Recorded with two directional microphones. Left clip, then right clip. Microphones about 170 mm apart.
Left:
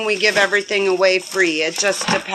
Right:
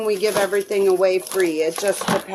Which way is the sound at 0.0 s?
5° right (ahead or behind).